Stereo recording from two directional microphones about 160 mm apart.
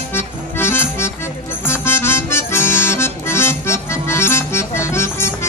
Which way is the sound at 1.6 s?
15° left (ahead or behind).